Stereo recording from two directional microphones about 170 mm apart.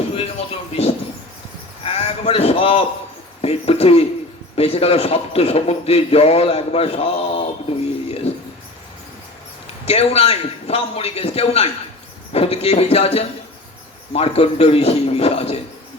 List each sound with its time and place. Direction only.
0.7 s a man's voice: 35° left (ahead or behind)
8.0 s music: 35° left (ahead or behind)
9.8 s a man's voice: 35° left (ahead or behind)